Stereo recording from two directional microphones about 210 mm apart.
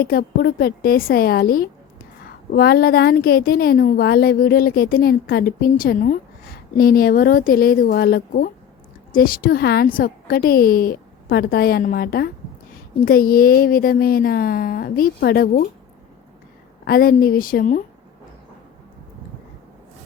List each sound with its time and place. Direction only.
0.0 s a woman's voice: 45° left (ahead or behind)
16.8 s a woman's voice: 45° left (ahead or behind)